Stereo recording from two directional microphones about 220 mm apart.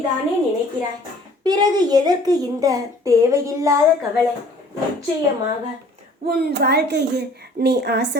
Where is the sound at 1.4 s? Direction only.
20° right (ahead or behind).